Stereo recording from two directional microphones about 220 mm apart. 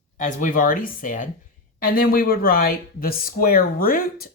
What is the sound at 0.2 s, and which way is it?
Speech, 35° left (ahead or behind).